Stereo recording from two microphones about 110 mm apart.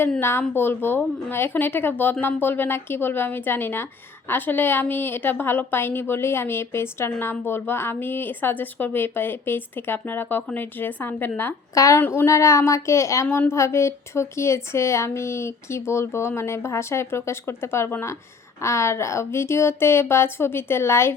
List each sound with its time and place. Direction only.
0.2 s a woman's voice: 20° left (ahead or behind)
11.7 s speech: 30° left (ahead or behind)
11.9 s a woman's voice: 20° left (ahead or behind)
13.2 s a woman's voice: 15° left (ahead or behind)
13.5 s a woman's voice: 25° left (ahead or behind)